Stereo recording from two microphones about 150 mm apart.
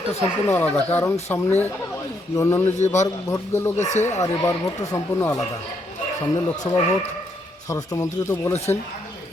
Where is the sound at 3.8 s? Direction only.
50° left (ahead or behind).